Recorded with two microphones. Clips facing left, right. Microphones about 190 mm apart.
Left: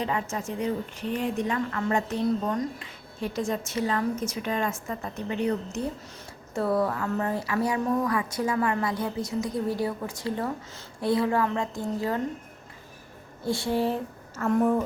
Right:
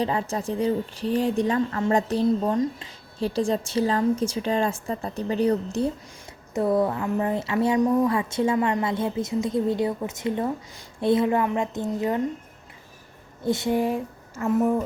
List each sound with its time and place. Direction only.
0.0 s a woman's voice: 30° right (ahead or behind)
6.5 s speech: 20° right (ahead or behind)
13.4 s speech: 20° right (ahead or behind)